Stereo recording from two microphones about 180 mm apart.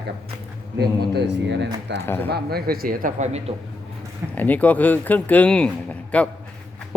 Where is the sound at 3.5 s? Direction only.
35° right (ahead or behind).